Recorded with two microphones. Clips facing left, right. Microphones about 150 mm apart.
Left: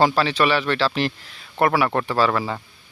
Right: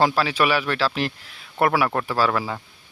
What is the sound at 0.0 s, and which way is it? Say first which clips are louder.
Speech: left 2 dB; centre (ahead or behind).